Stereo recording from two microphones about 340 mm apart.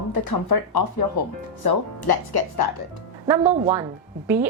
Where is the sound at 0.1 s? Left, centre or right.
Left.